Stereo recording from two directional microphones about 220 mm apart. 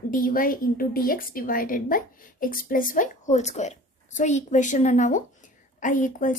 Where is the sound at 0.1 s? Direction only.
40° left (ahead or behind).